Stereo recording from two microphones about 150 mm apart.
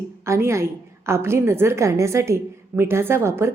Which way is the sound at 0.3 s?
20° right (ahead or behind).